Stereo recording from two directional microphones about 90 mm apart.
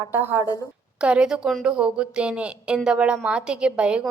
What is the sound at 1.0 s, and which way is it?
A woman's voice, 10° right (ahead or behind).